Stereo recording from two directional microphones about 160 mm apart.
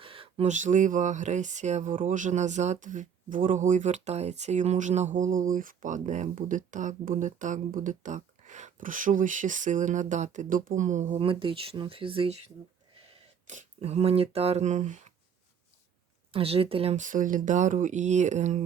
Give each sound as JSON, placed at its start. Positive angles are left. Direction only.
{"t": 0.0, "sound": "a sound", "side_deg": -35}
{"t": 0.4, "sound": "speech", "side_deg": -50}
{"t": 11.2, "sound": "speech", "side_deg": -35}
{"t": 13.5, "sound": "speech", "side_deg": -45}
{"t": 16.3, "sound": "speech", "side_deg": -35}